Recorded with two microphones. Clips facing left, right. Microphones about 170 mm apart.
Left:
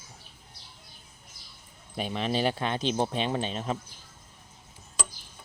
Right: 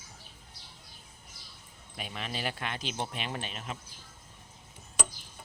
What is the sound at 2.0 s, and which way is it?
Speech, 30° left (ahead or behind).